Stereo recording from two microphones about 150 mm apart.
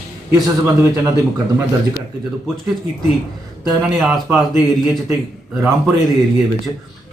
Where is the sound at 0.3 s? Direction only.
20° right (ahead or behind).